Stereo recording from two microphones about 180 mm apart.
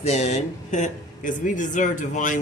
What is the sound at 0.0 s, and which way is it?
A man's voice, 40° left (ahead or behind).